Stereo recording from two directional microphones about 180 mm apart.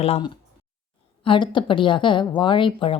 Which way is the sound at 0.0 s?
35° left (ahead or behind).